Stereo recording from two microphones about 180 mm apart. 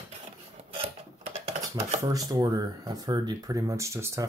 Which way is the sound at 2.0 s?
20° right (ahead or behind).